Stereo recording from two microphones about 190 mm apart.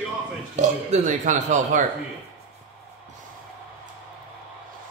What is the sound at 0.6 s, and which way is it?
Speech, 40° right (ahead or behind).